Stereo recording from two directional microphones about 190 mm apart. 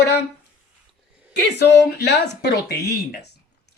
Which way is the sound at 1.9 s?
60° left (ahead or behind).